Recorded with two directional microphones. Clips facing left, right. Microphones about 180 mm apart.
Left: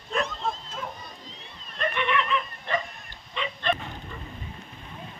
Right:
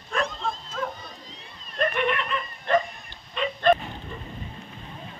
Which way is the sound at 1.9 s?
50° right (ahead or behind).